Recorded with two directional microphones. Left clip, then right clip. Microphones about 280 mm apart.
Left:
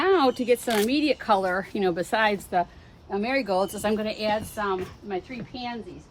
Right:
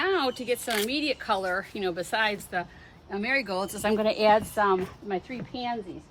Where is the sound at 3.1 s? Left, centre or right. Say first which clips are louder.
Left 3 dB; centre; by 5.8 s right.